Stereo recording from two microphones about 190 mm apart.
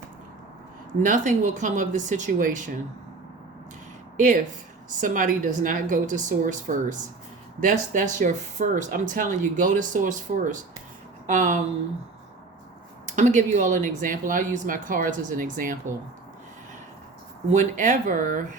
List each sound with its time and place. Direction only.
1.0 s speech: 40° right (ahead or behind)
4.9 s speech: 45° right (ahead or behind)
13.1 s speech: 40° right (ahead or behind)
17.5 s speech: 40° right (ahead or behind)